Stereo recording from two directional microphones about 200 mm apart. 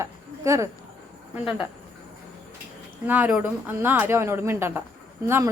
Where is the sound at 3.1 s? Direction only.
10° right (ahead or behind).